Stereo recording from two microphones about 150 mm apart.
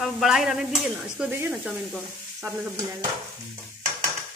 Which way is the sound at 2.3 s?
20° right (ahead or behind).